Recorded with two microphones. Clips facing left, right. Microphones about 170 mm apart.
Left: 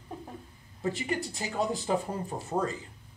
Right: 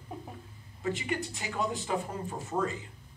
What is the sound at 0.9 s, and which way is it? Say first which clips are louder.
A man's voice: left 1 dB; 35° left (ahead or behind).